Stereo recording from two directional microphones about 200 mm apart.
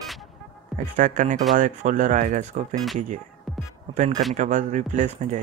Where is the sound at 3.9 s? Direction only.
35° right (ahead or behind).